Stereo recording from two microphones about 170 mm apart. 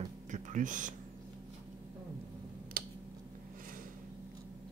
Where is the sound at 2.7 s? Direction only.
55° right (ahead or behind).